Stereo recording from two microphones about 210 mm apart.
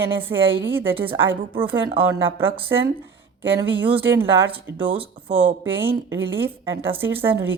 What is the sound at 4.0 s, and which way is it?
Speech, 10° right (ahead or behind).